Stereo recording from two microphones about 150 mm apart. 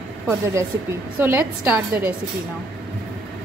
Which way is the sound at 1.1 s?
15° right (ahead or behind).